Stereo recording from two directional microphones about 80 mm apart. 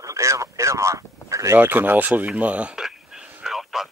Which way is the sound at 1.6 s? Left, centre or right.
Right.